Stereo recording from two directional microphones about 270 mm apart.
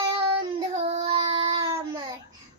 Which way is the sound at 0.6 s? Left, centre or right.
Centre.